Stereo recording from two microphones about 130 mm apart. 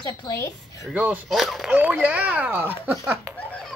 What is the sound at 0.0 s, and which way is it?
Speech, 25° left (ahead or behind).